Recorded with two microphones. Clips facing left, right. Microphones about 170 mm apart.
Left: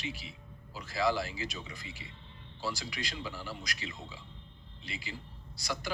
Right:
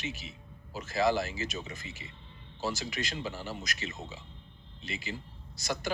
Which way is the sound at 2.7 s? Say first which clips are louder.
Right 3 dB; 45° right (ahead or behind).